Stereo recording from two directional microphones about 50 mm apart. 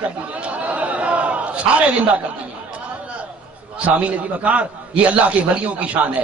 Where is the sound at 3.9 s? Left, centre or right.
Right.